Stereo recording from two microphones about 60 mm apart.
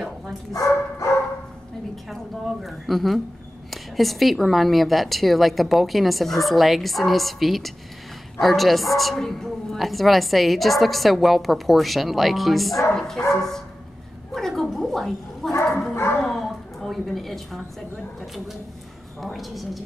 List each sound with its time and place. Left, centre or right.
0.5 s speech: left
2.0 s a woman's voice: centre
13.3 s dog: centre
14.3 s a sound: centre
15.9 s speech: left
16.2 s a sound: centre
19.2 s a woman's voice: centre